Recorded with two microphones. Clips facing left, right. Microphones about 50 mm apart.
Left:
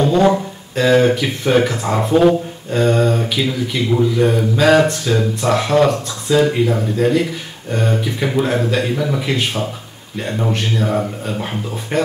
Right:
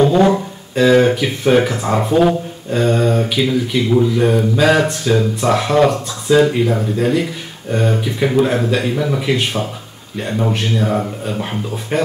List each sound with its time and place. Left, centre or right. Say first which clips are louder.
0.0 s speech: right 1 dB; centre